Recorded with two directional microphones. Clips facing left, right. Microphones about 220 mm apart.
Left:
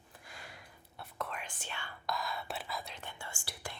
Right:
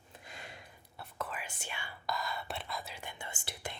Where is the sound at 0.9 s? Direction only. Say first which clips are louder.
Even; centre (ahead or behind).